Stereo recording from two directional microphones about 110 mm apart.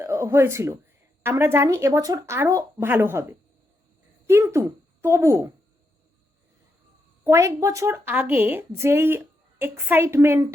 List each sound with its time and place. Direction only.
0.0 s a woman's voice: 25° right (ahead or behind)
7.3 s a woman's voice: 30° right (ahead or behind)